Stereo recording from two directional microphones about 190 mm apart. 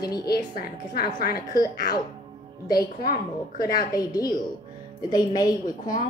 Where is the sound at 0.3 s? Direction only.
55° left (ahead or behind).